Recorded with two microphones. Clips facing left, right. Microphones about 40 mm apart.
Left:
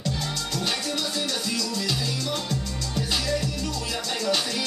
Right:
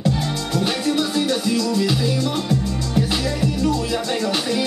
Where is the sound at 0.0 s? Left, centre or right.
Centre.